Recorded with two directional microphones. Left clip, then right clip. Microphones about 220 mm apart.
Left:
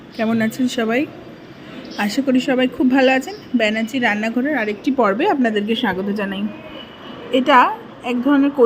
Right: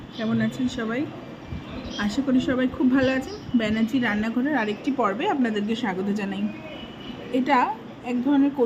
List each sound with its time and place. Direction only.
0.2 s a woman's voice: 25° left (ahead or behind); by 4.8 s 5° left (ahead or behind)
4.9 s a woman's voice: 20° left (ahead or behind); by 8.4 s 5° left (ahead or behind)